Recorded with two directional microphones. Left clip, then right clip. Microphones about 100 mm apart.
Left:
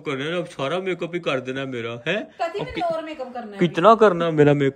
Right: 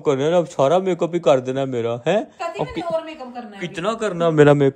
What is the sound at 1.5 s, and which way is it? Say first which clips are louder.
Speech: right 6 dB; 50° right (ahead or behind).